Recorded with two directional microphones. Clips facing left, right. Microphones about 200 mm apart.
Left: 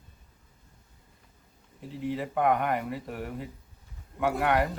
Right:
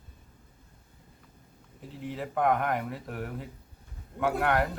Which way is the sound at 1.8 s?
Centre (ahead or behind).